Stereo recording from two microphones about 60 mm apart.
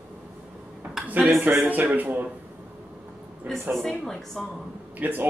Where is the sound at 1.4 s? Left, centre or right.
Right.